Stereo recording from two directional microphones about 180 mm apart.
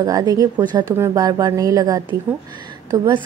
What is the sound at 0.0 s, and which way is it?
A woman's voice, 20° right (ahead or behind).